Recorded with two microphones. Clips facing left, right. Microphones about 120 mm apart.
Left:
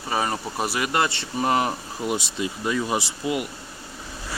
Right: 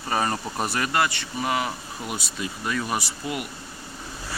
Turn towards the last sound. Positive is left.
turn(degrees=20)  # may be behind; listen again after turning